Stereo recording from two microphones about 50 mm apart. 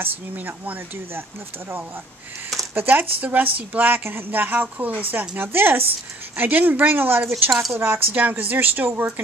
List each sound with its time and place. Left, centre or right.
0.0 s a woman's voice: right
2.7 s a woman's voice: right
5.3 s speech: right
7.7 s speech: right
8.1 s a woman's voice: right